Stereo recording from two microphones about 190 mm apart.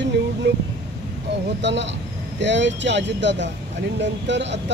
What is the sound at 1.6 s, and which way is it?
Speech, 70° right (ahead or behind).